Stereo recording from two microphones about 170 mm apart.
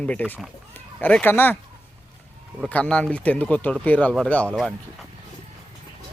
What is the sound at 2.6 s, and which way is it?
Speech, 10° left (ahead or behind).